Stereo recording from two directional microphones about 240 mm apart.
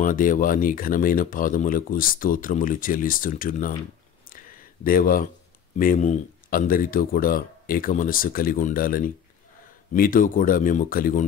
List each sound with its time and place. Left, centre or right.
0.0 s speech: left
4.3 s a sound: left
5.8 s speech: left